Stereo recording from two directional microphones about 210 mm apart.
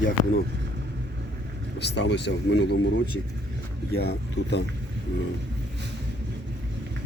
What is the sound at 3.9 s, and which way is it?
Speech, 50° left (ahead or behind).